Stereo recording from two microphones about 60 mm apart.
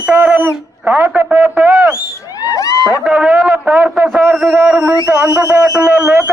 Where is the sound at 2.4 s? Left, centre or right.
Left.